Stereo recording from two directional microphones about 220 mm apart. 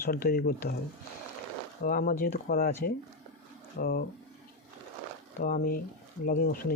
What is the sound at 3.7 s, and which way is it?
Speech, 45° left (ahead or behind).